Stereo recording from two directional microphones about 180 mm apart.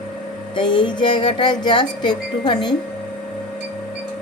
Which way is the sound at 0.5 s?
25° left (ahead or behind).